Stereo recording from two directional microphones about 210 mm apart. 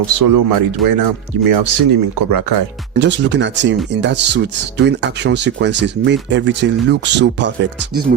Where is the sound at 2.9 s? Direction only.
55° right (ahead or behind).